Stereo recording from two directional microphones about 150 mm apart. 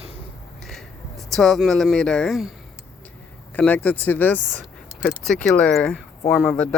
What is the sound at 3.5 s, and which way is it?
Speech, 10° left (ahead or behind).